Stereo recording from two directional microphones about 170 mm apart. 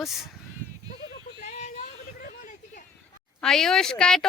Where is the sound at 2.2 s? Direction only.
55° left (ahead or behind).